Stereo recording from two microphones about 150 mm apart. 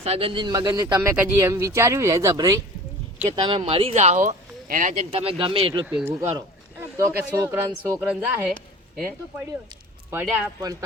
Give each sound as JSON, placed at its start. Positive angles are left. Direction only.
{"t": 0.0, "sound": "speech", "side_deg": -40}
{"t": 5.1, "sound": "speech", "side_deg": -40}
{"t": 5.8, "sound": "a woman's voice", "side_deg": -10}
{"t": 7.9, "sound": "a woman's voice", "side_deg": -10}
{"t": 10.1, "sound": "a woman's voice", "side_deg": -10}
{"t": 10.6, "sound": "speech", "side_deg": -25}